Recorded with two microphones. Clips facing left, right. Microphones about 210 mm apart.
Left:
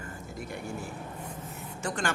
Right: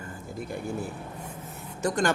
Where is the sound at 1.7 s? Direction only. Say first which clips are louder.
Right 7 dB; 40° right (ahead or behind).